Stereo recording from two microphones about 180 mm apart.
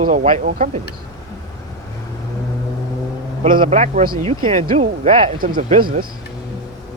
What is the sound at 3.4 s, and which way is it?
Speech, 50° right (ahead or behind).